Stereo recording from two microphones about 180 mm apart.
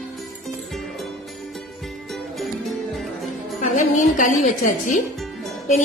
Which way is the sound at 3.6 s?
45° left (ahead or behind).